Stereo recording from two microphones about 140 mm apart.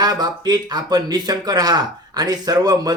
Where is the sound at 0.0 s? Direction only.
30° right (ahead or behind).